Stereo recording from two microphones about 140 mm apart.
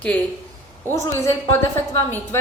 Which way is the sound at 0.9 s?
20° left (ahead or behind).